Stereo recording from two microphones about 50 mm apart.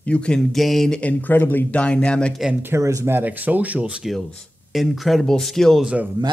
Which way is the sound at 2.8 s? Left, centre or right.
Right.